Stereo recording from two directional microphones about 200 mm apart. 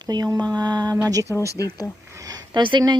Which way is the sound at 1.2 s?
15° left (ahead or behind).